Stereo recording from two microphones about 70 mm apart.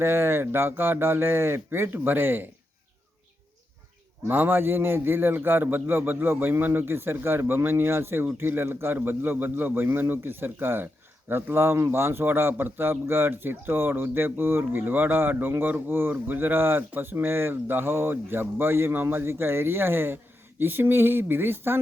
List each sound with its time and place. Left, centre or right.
0.0 s a man's voice: right
4.3 s a man's voice: right